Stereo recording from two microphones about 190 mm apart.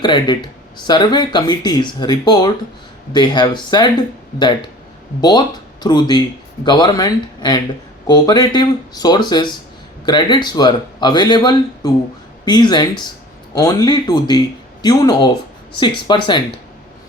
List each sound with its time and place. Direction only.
0.0 s speech: 20° left (ahead or behind)
5.8 s speech: 20° left (ahead or behind)